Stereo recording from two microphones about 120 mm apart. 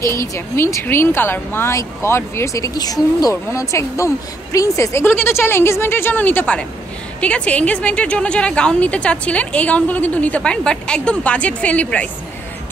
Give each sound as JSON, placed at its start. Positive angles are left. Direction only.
{"t": 0.0, "sound": "a woman's voice", "side_deg": 25}